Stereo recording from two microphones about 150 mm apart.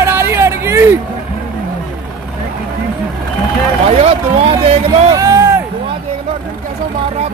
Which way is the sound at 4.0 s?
40° right (ahead or behind).